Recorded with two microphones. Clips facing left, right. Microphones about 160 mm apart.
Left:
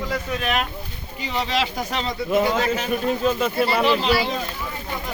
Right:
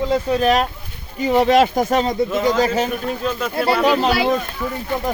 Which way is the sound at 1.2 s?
50° right (ahead or behind).